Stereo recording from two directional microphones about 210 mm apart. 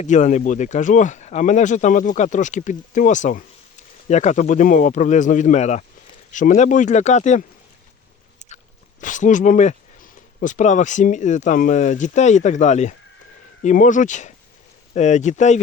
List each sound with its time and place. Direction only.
0.0 s speech: 35° left (ahead or behind)
8.4 s speech: 35° left (ahead or behind)